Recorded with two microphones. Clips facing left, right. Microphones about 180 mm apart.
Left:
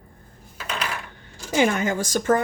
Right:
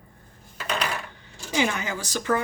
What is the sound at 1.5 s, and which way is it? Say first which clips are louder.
Speech: left 5 dB; 50° left (ahead or behind).